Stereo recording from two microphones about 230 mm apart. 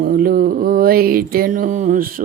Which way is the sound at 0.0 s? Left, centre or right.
Right.